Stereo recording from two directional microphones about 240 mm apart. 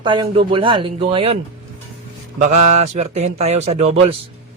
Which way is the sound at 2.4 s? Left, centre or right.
Right.